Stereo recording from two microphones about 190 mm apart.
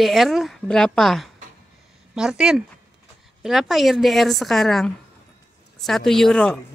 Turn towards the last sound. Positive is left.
turn(degrees=5)  # may be behind; listen again after turning